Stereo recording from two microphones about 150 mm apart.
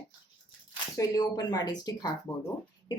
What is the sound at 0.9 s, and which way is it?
A woman's voice, 25° left (ahead or behind).